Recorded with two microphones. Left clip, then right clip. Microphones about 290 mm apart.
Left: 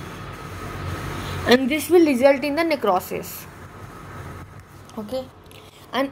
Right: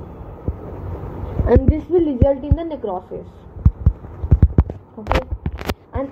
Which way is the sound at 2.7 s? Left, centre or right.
Left.